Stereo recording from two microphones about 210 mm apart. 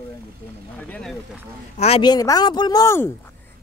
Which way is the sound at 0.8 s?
5° left (ahead or behind).